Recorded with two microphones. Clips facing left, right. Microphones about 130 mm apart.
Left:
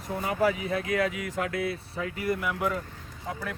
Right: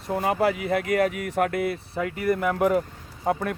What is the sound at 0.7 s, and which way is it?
Speech, 55° right (ahead or behind).